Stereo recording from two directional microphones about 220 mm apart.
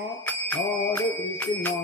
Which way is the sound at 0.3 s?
10° left (ahead or behind).